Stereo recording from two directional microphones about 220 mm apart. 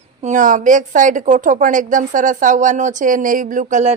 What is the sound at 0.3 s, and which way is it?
Speech, 35° right (ahead or behind).